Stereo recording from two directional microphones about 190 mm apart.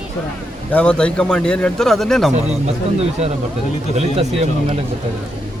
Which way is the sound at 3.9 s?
35° right (ahead or behind).